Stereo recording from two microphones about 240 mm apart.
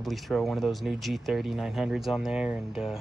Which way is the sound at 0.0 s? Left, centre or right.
Centre.